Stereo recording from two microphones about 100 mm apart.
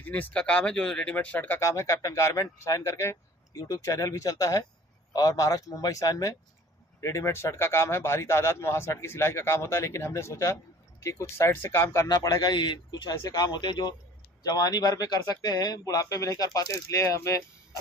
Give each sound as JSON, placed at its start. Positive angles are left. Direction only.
{"t": 0.0, "sound": "speech", "side_deg": 15}
{"t": 1.6, "sound": "a man's voice", "side_deg": 30}
{"t": 12.1, "sound": "a man's voice", "side_deg": 40}